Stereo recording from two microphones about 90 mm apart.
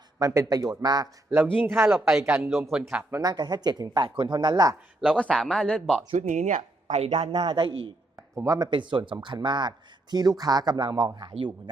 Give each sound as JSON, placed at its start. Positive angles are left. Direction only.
{"t": 0.2, "sound": "speech", "side_deg": -40}
{"t": 1.3, "sound": "speech", "side_deg": -25}
{"t": 2.0, "sound": "speech", "side_deg": -5}
{"t": 3.2, "sound": "speech", "side_deg": -50}
{"t": 4.9, "sound": "speech", "side_deg": 10}
{"t": 7.1, "sound": "a man's voice", "side_deg": -75}
{"t": 8.4, "sound": "speech", "side_deg": -45}